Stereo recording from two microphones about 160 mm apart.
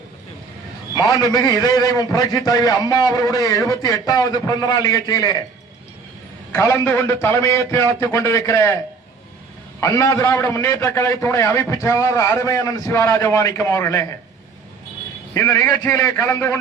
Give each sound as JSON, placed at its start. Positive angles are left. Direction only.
{"t": 0.9, "sound": "a man's voice", "side_deg": 25}
{"t": 6.5, "sound": "a man's voice", "side_deg": 20}
{"t": 9.8, "sound": "a man's voice", "side_deg": 20}
{"t": 15.3, "sound": "a man's voice", "side_deg": 20}